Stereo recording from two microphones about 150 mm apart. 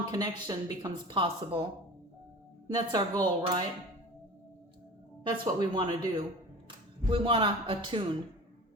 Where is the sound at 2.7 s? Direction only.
25° right (ahead or behind).